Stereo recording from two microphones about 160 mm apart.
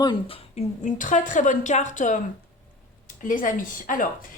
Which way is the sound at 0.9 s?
50° left (ahead or behind).